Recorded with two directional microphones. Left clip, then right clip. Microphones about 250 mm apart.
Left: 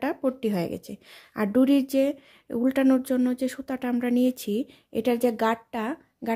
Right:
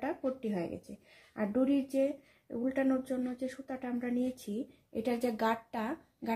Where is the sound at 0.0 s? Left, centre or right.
Left.